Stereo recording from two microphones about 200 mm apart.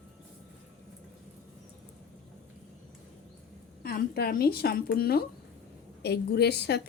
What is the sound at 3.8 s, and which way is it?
A woman's voice, 50° left (ahead or behind).